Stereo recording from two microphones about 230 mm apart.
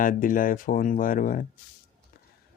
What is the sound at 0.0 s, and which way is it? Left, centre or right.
Speech, left.